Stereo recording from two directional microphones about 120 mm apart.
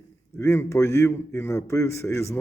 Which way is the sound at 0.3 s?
25° left (ahead or behind).